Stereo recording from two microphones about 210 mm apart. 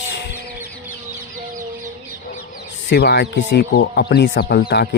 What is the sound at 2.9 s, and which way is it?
Speech, 50° left (ahead or behind).